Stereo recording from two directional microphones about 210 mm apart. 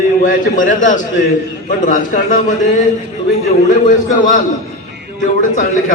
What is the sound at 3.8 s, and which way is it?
Speech, 35° left (ahead or behind).